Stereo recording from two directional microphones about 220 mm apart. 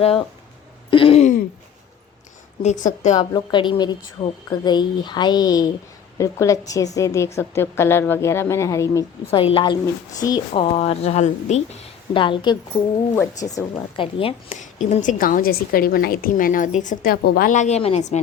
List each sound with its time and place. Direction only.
0.0 s speech: 25° left (ahead or behind)
2.6 s a woman's voice: 35° left (ahead or behind)
3.2 s a woman's voice: 20° left (ahead or behind)
13.9 s a woman's voice: 25° left (ahead or behind)